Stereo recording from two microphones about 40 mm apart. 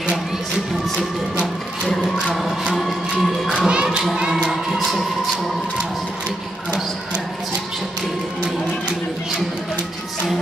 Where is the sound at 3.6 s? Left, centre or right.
Right.